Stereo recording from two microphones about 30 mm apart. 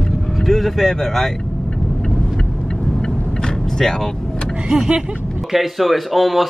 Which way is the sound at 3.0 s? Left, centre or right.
Left.